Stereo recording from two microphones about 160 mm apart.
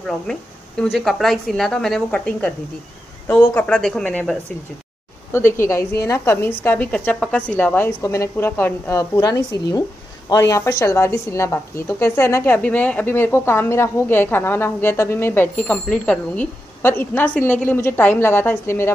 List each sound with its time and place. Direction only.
0.9 s a woman's voice: centre (ahead or behind)